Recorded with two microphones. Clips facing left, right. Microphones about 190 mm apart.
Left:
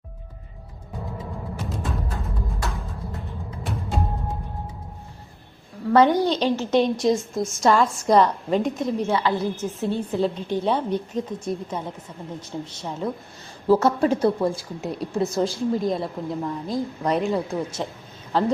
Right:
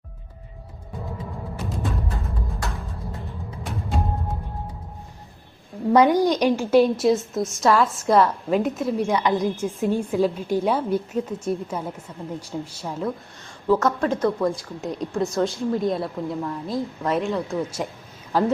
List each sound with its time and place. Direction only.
1.5 s music: centre (ahead or behind)
5.9 s a woman's voice: 10° right (ahead or behind)
13.7 s speech: 30° left (ahead or behind)
14.0 s a woman's voice: 10° left (ahead or behind); by 18.5 s 10° right (ahead or behind)